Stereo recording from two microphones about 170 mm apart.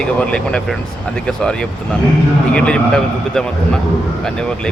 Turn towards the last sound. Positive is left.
turn(degrees=5)  # may be behind; listen again after turning